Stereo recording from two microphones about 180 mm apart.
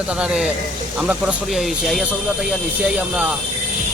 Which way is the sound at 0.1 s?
5° right (ahead or behind).